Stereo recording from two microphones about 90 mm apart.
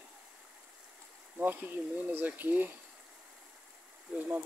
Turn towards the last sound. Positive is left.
turn(degrees=-15)  # may be behind; listen again after turning